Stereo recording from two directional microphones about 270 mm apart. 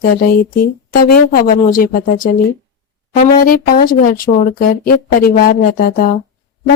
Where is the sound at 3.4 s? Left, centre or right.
Left.